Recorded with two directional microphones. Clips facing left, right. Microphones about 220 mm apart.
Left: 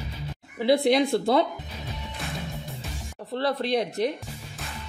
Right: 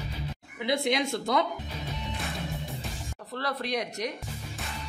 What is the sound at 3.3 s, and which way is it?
Speech, 30° left (ahead or behind).